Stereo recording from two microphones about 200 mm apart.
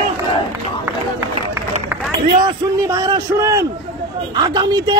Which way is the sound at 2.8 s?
15° right (ahead or behind).